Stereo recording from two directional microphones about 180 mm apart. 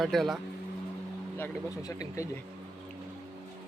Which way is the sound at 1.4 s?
15° left (ahead or behind).